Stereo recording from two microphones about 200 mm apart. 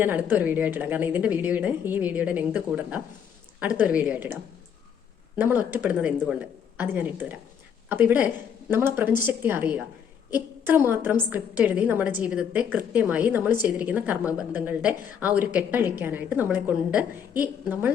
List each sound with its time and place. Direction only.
0.0 s a woman's voice: 10° right (ahead or behind)
5.4 s a woman's voice: 10° right (ahead or behind)